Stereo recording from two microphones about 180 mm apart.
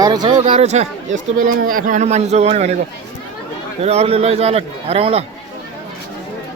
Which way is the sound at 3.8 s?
35° right (ahead or behind).